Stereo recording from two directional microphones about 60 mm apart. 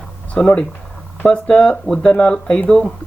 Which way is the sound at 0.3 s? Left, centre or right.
Left.